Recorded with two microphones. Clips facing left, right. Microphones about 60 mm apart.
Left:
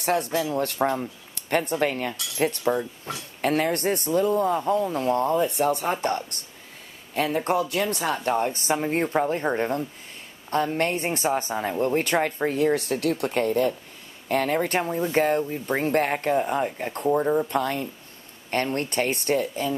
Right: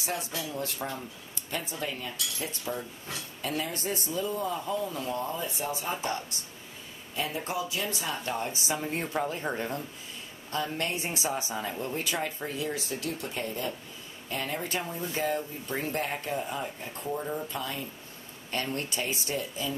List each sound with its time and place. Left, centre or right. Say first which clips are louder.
0.0 s speech: left 10 dB; left
3.3 s a woman's voice: left 11 dB; left
17.5 s a woman's voice: left 10 dB; left